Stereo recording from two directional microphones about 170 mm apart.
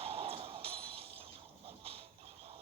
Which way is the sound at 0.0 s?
35° right (ahead or behind).